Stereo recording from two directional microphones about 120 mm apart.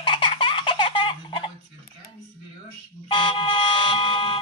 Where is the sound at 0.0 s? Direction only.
45° left (ahead or behind).